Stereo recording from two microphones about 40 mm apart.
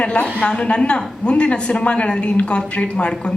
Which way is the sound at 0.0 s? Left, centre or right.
Left.